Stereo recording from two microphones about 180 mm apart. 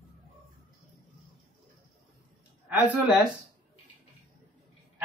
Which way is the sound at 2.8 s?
10° right (ahead or behind).